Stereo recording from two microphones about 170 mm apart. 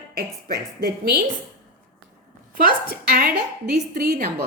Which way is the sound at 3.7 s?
50° right (ahead or behind).